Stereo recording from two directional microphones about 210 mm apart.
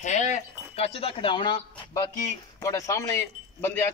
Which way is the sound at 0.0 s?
35° left (ahead or behind).